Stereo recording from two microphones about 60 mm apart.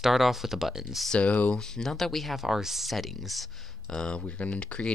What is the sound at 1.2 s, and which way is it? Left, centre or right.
Speech, left.